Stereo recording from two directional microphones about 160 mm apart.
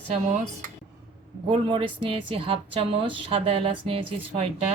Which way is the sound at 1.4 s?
35° right (ahead or behind).